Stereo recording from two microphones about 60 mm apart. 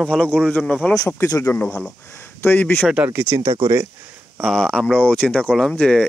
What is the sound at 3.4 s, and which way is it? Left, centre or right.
Speech, right.